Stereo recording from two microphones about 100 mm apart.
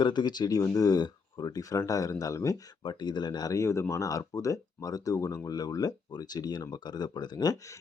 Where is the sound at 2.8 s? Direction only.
45° left (ahead or behind).